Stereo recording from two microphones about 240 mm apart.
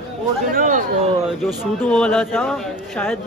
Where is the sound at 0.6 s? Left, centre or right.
Right.